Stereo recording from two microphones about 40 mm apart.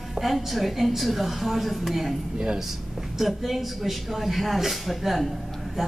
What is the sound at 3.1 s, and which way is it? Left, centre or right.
A woman's voice, centre.